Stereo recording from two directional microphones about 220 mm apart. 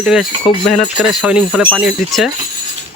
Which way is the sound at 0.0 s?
Centre (ahead or behind).